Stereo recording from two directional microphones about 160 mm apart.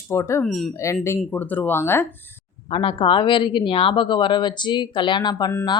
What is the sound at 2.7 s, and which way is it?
Speech, 35° left (ahead or behind).